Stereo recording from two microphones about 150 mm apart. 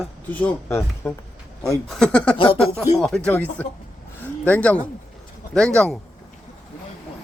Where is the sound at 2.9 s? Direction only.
5° left (ahead or behind).